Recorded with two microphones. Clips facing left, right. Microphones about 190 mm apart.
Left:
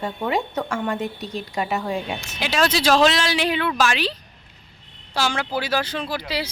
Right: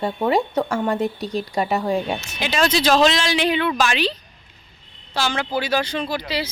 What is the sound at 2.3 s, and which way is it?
A woman's voice, 5° left (ahead or behind).